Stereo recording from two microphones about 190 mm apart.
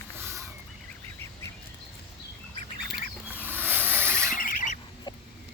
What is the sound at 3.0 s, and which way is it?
Rodents, 10° right (ahead or behind).